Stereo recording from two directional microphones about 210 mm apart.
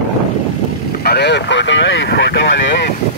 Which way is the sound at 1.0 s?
50° left (ahead or behind).